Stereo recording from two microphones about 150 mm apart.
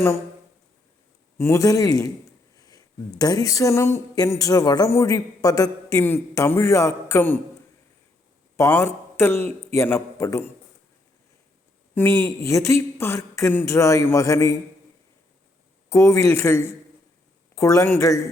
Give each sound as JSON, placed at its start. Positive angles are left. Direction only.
{"t": 1.4, "sound": "speech", "side_deg": 20}
{"t": 8.5, "sound": "a man's voice", "side_deg": 20}
{"t": 11.9, "sound": "speech", "side_deg": 15}
{"t": 15.9, "sound": "speech", "side_deg": 20}